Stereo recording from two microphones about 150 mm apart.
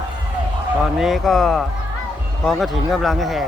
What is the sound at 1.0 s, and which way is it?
Speech, centre (ahead or behind).